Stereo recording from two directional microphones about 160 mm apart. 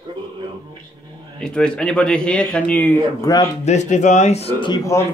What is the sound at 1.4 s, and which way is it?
Speech, 5° left (ahead or behind).